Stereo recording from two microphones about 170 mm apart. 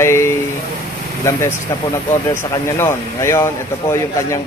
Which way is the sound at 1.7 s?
20° left (ahead or behind).